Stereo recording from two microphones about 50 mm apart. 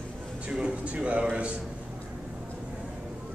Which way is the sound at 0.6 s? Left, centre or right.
Right.